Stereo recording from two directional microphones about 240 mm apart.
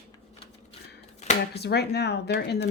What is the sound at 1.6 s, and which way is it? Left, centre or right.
A woman's voice, left.